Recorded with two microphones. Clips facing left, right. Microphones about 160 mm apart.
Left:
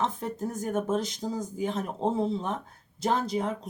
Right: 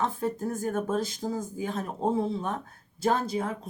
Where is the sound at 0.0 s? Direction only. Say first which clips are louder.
Right 1 dB; 20° left (ahead or behind).